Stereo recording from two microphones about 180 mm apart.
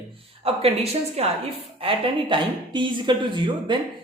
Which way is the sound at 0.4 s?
35° right (ahead or behind).